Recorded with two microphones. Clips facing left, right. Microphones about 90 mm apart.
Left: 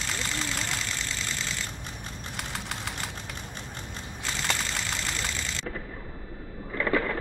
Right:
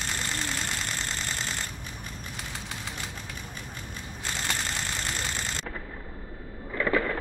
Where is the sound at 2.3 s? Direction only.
65° left (ahead or behind).